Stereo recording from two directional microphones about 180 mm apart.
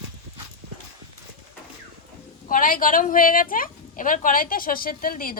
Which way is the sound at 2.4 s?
50° left (ahead or behind).